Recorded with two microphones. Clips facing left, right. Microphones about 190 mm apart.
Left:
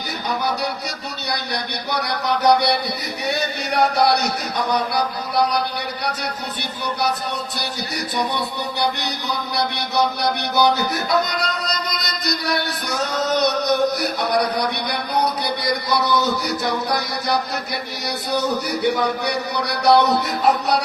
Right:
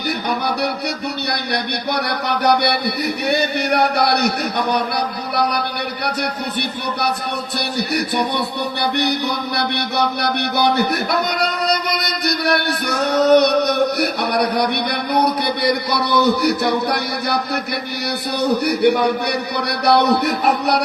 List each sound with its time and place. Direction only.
1.9 s a man's voice: 65° right (ahead or behind)
7.8 s a man's voice: 65° right (ahead or behind)
18.3 s a man's voice: 65° right (ahead or behind)